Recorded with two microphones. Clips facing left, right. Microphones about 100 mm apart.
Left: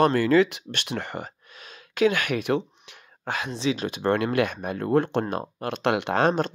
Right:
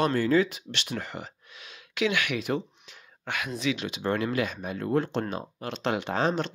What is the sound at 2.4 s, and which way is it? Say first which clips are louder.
Speech: left 5 dB; 65° left (ahead or behind).